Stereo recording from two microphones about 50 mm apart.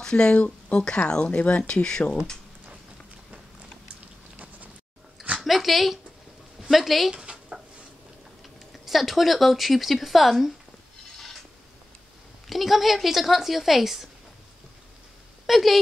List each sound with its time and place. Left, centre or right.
0.0 s speech: centre
5.4 s speech: centre
8.7 s speech: centre
12.4 s speech: centre
15.4 s speech: centre